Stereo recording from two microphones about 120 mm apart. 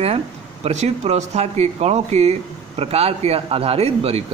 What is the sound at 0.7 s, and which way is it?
Speech, 65° right (ahead or behind).